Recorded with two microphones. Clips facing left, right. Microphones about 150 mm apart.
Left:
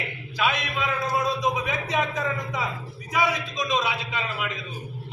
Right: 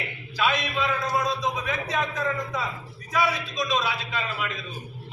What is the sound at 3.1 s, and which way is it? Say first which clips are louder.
A man's voice: even; 15° left (ahead or behind).